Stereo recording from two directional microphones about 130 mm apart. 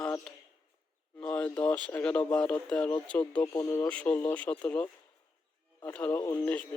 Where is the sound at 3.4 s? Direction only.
30° left (ahead or behind).